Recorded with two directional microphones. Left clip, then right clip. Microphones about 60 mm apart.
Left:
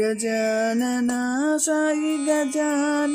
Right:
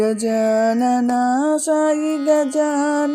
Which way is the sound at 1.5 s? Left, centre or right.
Centre.